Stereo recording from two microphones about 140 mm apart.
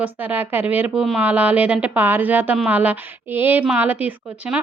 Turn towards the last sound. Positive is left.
turn(degrees=-10)  # may be behind; listen again after turning